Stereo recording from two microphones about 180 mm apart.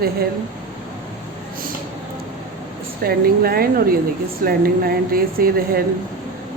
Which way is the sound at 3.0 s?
55° right (ahead or behind).